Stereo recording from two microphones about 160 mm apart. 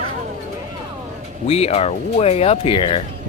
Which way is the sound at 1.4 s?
40° left (ahead or behind).